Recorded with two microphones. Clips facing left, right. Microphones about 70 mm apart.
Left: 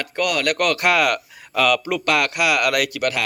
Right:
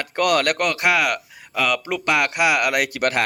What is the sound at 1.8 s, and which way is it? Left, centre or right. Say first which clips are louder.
Speech: left 1 dB; right.